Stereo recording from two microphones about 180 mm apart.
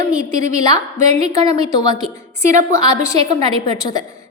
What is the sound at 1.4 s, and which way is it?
A woman's voice, 20° left (ahead or behind).